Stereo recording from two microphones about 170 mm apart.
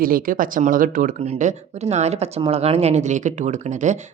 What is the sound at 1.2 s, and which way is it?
Speech, 40° right (ahead or behind).